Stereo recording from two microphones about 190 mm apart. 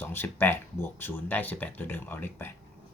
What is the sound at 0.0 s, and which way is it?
Speech, 10° left (ahead or behind).